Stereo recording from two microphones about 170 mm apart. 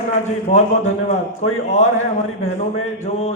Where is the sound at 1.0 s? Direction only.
40° left (ahead or behind).